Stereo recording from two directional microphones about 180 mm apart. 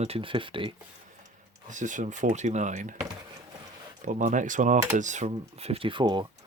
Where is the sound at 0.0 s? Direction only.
30° right (ahead or behind).